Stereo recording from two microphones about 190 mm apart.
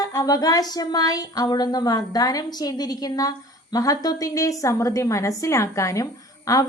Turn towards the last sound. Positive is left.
turn(degrees=15)  # may be behind; listen again after turning